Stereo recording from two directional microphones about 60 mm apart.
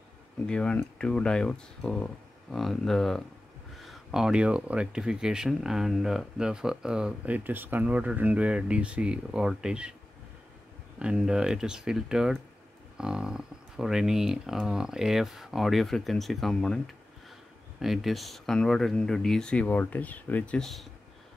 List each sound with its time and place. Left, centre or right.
0.5 s speech: centre
7.2 s speech: right; by 9.9 s centre
11.0 s speech: centre
17.7 s speech: centre; by 20.5 s left
20.5 s speech: centre